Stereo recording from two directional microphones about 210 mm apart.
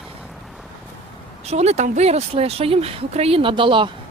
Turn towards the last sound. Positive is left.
turn(degrees=-25)  # may be behind; listen again after turning